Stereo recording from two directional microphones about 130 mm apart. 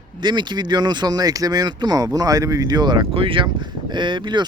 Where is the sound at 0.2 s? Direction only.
35° right (ahead or behind).